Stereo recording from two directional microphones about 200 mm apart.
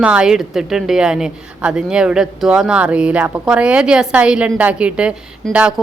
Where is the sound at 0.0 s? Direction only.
5° right (ahead or behind).